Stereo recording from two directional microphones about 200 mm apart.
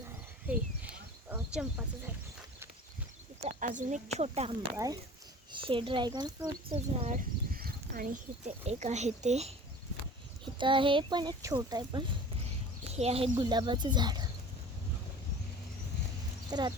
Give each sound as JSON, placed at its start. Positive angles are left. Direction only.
{"t": 0.4, "sound": "speech", "side_deg": -5}
{"t": 3.4, "sound": "speech", "side_deg": -40}
{"t": 6.9, "sound": "speech", "side_deg": -30}
{"t": 7.2, "sound": "speech", "side_deg": -45}
{"t": 12.9, "sound": "speech", "side_deg": -30}
{"t": 16.5, "sound": "speech", "side_deg": -20}